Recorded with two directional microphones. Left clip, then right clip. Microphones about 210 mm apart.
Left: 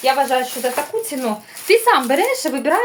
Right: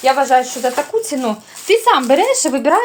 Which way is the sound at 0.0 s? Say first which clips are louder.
Right 4 dB; 30° right (ahead or behind).